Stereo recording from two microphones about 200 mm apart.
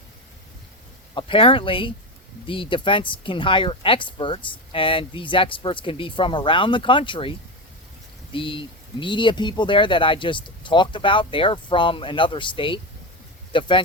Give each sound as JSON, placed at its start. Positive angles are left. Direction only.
{"t": 1.1, "sound": "speech", "side_deg": 25}